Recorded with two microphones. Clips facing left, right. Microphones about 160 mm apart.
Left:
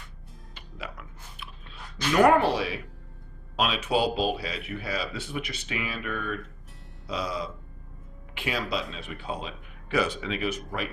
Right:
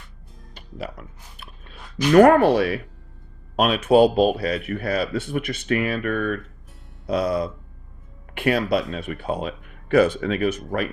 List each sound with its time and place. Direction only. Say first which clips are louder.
0.5 s chewing: right 7 dB; 40° right (ahead or behind)
2.1 s a man's voice: right 7 dB; 55° right (ahead or behind)